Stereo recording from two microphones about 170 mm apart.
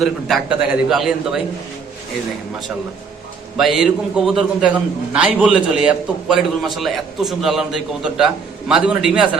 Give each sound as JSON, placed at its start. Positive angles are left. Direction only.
{"t": 0.0, "sound": "a man's voice", "side_deg": 0}
{"t": 3.6, "sound": "a man's voice", "side_deg": 0}